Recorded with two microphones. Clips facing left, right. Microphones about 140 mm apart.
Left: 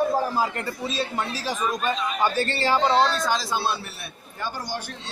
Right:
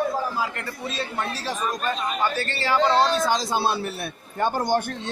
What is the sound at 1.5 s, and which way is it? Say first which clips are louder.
Speech: left 2 dB; 5° left (ahead or behind).